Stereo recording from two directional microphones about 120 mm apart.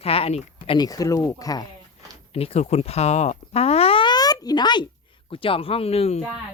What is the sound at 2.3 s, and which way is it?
Speech, 55° left (ahead or behind).